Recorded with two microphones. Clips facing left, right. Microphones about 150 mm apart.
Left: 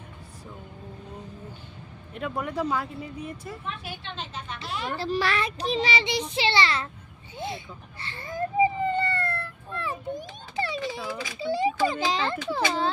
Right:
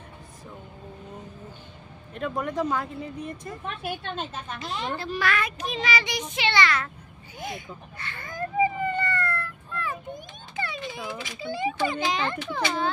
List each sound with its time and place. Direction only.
2.1 s speech: 5° left (ahead or behind)
3.6 s speech: 50° right (ahead or behind)
4.9 s a child's voice: 35° left (ahead or behind)
7.3 s a sound: 25° left (ahead or behind)
11.3 s a child's voice: 35° left (ahead or behind)